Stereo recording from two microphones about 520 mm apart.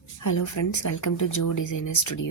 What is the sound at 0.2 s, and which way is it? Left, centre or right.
Speech, left.